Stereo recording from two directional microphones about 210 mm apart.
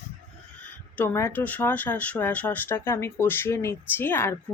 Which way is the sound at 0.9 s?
10° left (ahead or behind).